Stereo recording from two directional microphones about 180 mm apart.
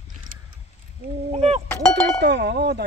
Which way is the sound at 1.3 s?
35° right (ahead or behind).